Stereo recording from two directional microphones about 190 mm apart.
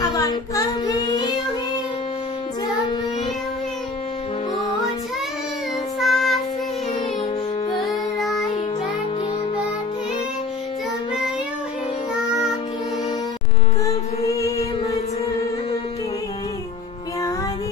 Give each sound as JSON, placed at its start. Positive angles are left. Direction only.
{"t": 0.0, "sound": "child singing", "side_deg": 20}
{"t": 5.9, "sound": "child singing", "side_deg": 0}
{"t": 7.8, "sound": "music", "side_deg": 0}
{"t": 12.3, "sound": "child singing", "side_deg": 0}
{"t": 13.8, "sound": "music", "side_deg": 15}